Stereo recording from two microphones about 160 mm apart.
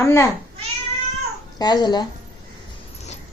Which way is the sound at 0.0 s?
15° left (ahead or behind).